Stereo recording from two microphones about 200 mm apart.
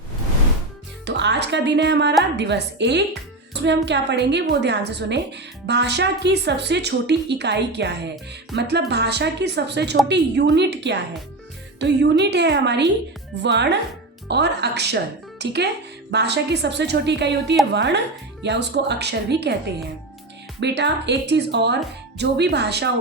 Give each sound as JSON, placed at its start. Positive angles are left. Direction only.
{"t": 1.0, "sound": "speech", "side_deg": -60}
{"t": 20.6, "sound": "speech", "side_deg": -60}